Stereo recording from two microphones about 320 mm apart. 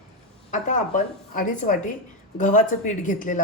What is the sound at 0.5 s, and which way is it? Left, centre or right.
A woman's voice, left.